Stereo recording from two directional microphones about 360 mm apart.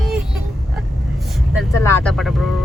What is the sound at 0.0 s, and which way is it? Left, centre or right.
Vehicle, centre.